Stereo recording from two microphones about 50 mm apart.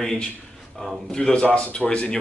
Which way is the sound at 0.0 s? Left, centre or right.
Centre.